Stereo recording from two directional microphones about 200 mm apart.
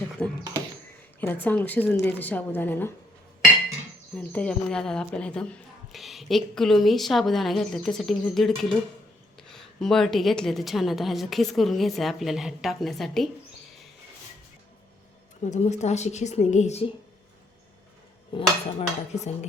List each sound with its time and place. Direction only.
0.2 s a woman's voice: 5° left (ahead or behind)
4.1 s speech: 5° left (ahead or behind)
15.4 s a woman's voice: 35° left (ahead or behind)
18.3 s a woman's voice: 35° left (ahead or behind)